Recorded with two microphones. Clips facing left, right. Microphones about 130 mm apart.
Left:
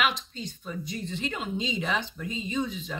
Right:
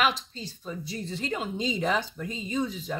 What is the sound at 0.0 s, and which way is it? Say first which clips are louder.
Speech: right 2 dB; 35° right (ahead or behind).